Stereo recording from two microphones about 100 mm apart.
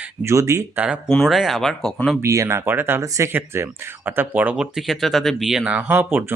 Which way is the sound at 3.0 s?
35° right (ahead or behind).